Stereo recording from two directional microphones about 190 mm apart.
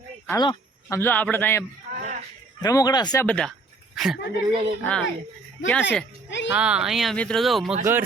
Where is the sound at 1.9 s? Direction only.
40° right (ahead or behind).